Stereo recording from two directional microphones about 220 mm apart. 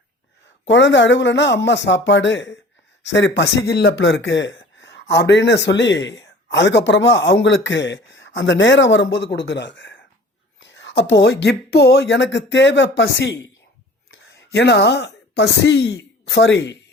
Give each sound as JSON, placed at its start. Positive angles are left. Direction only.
{"t": 0.7, "sound": "speech", "side_deg": 55}